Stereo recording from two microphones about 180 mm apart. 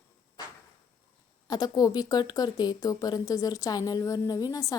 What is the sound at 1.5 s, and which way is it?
A woman's voice, 20° left (ahead or behind).